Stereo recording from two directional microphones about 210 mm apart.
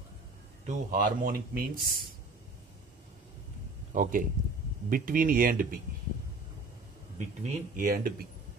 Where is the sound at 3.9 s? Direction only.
40° right (ahead or behind).